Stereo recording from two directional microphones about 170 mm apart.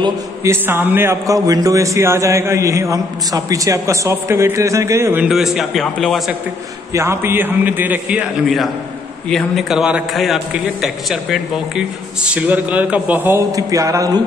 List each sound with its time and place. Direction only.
0.0 s a man's voice: 15° right (ahead or behind); by 6.3 s centre (ahead or behind)
6.9 s a man's voice: 15° right (ahead or behind)